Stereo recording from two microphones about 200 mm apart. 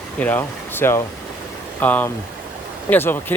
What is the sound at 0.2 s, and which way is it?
Speech, 10° left (ahead or behind).